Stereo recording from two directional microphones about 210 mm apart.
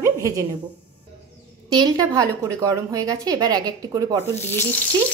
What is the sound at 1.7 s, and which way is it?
A woman's voice, 20° right (ahead or behind).